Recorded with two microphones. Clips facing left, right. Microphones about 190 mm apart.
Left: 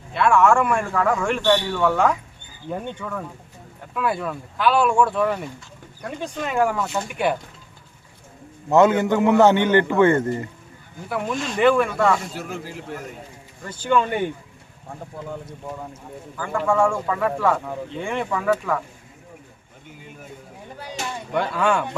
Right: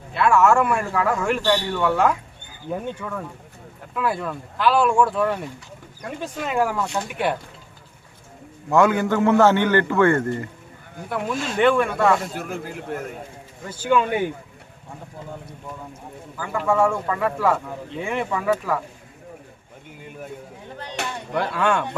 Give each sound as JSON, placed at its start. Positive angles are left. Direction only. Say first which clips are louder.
{"t": 0.1, "sound": "a man's voice", "louder": "even", "side_deg": 0}
{"t": 8.7, "sound": "a man's voice", "louder": "left 2 dB", "side_deg": 20}
{"t": 11.1, "sound": "a man's voice", "louder": "even", "side_deg": 0}
{"t": 12.3, "sound": "a man's voice", "louder": "right 2 dB", "side_deg": -55}
{"t": 13.6, "sound": "speech", "louder": "even", "side_deg": -5}
{"t": 16.4, "sound": "a man's voice", "louder": "even", "side_deg": -5}
{"t": 21.0, "sound": "a sound", "louder": "right 1 dB", "side_deg": -65}
{"t": 21.3, "sound": "a man's voice", "louder": "left 1 dB", "side_deg": 0}